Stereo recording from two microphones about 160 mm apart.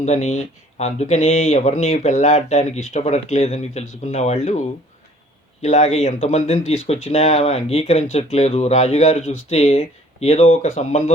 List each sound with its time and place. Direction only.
0.0 s speech: 45° left (ahead or behind)
5.6 s speech: 45° left (ahead or behind)